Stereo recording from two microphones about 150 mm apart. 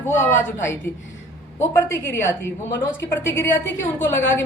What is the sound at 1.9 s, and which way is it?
A woman's voice, 15° left (ahead or behind).